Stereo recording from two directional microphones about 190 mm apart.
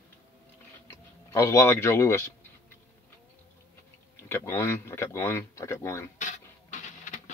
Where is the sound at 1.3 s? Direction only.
15° left (ahead or behind).